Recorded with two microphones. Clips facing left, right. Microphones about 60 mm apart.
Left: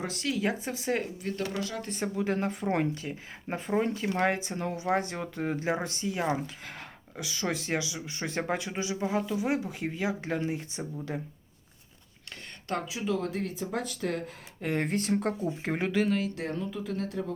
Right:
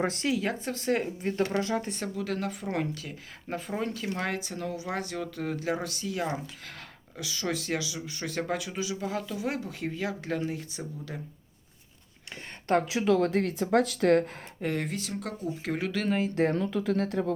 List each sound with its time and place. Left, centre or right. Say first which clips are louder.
0.0 s speech: right 6 dB; right
0.3 s speech: even; centre
1.2 s speech: right 4 dB; right
2.0 s speech: left 3 dB; left
12.8 s speech: right 6 dB; right
14.8 s speech: left 6 dB; left
16.3 s speech: right 9 dB; right
16.6 s speech: right 6 dB; right